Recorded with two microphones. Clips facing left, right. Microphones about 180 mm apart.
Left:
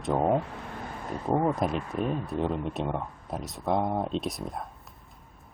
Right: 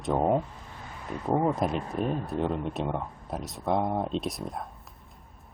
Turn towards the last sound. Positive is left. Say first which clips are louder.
# even
turn(degrees=0)  # may be behind; listen again after turning